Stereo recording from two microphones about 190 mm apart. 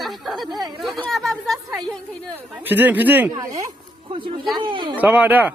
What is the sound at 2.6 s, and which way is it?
Speech, 10° right (ahead or behind).